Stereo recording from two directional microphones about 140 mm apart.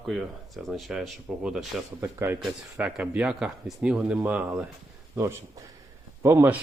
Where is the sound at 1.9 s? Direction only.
15° right (ahead or behind).